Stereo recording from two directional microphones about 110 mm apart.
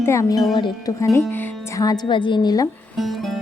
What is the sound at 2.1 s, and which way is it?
Speech, 45° left (ahead or behind).